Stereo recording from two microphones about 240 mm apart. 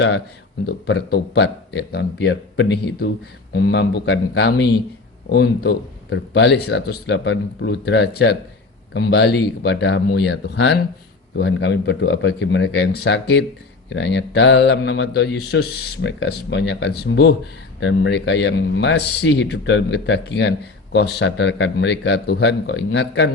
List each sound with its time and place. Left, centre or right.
0.9 s speech: left